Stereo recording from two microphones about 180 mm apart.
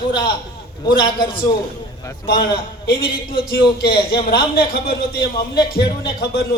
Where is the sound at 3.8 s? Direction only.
60° left (ahead or behind).